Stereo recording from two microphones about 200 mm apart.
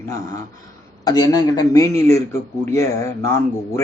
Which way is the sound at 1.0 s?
20° left (ahead or behind).